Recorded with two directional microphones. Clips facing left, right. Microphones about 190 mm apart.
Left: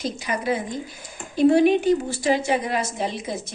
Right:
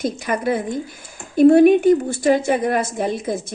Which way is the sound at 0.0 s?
50° right (ahead or behind).